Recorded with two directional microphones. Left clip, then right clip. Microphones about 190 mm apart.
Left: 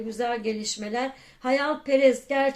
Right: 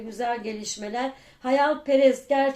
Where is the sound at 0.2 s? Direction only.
30° left (ahead or behind).